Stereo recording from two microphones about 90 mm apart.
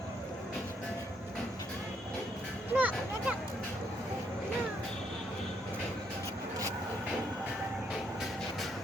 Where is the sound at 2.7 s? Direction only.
20° right (ahead or behind).